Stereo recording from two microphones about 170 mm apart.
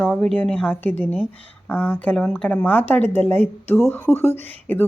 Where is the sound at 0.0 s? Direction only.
10° left (ahead or behind).